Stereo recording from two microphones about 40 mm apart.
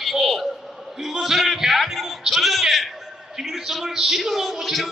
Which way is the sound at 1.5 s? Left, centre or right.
Centre.